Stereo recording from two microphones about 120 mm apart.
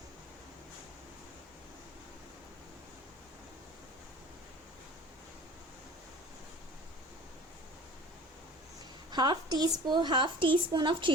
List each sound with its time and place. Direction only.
9.1 s a woman's voice: 40° right (ahead or behind)